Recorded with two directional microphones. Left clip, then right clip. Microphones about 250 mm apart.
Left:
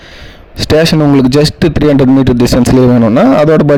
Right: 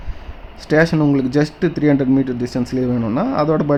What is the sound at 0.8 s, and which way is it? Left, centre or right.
Speech, left.